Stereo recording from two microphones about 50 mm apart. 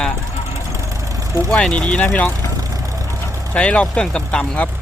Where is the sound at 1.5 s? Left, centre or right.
Centre.